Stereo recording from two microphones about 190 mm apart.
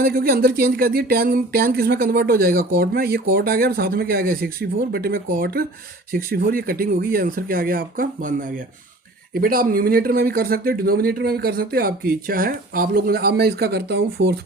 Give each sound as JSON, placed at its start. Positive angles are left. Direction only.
{"t": 0.0, "sound": "speech", "side_deg": -55}